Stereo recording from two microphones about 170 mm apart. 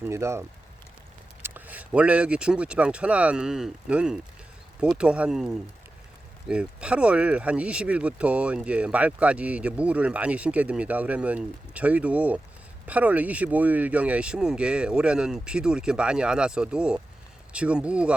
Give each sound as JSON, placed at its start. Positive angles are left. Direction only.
{"t": 0.0, "sound": "speech", "side_deg": -15}